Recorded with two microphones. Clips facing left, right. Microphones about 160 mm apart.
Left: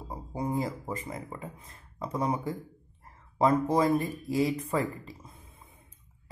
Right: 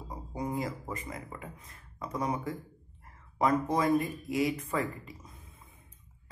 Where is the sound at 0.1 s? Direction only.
30° left (ahead or behind).